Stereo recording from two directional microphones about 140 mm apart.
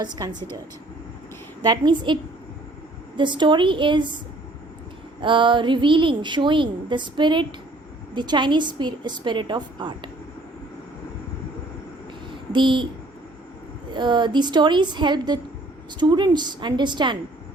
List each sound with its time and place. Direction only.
0.2 s speech: 25° right (ahead or behind)
1.6 s a woman's voice: 30° right (ahead or behind)
3.2 s a woman's voice: 35° right (ahead or behind)
5.2 s a woman's voice: 35° right (ahead or behind)
12.5 s a woman's voice: 35° right (ahead or behind)
13.9 s a woman's voice: 35° right (ahead or behind)